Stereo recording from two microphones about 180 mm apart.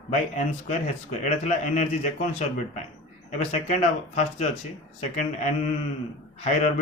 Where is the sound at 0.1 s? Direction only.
40° left (ahead or behind).